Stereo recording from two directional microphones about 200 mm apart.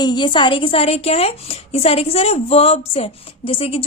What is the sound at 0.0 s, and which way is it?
A woman's voice, 20° left (ahead or behind).